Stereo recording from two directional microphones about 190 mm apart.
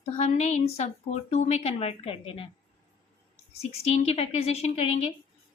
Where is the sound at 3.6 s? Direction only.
30° left (ahead or behind).